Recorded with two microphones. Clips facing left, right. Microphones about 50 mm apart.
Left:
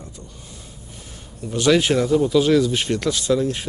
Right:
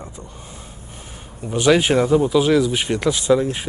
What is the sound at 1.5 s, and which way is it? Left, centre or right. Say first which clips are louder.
Speech: right 2 dB; centre.